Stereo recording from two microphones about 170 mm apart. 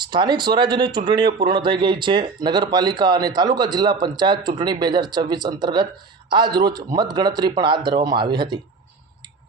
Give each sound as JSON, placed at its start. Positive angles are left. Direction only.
{"t": 0.1, "sound": "speech", "side_deg": -25}